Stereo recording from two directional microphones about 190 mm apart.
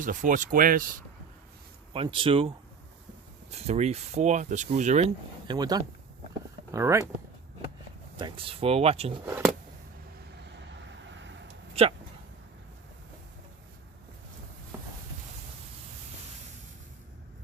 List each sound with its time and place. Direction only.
0.0 s speech: 45° right (ahead or behind)
1.9 s speech: 30° right (ahead or behind)
3.5 s speech: 35° right (ahead or behind)
5.5 s speech: 20° right (ahead or behind)
8.1 s speech: 25° right (ahead or behind)
11.1 s vehicle: 70° right (ahead or behind)
11.7 s a sound: 30° right (ahead or behind)